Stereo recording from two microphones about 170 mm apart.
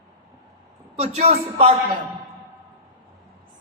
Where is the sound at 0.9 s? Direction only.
40° right (ahead or behind).